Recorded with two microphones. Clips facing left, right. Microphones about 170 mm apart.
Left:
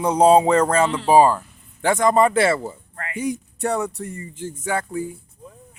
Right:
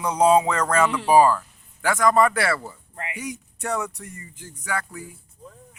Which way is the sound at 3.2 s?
30° left (ahead or behind).